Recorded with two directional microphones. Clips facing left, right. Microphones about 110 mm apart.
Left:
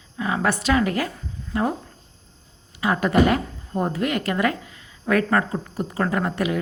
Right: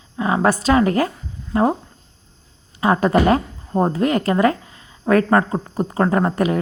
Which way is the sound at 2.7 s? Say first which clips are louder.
Right 3 dB; 35° right (ahead or behind).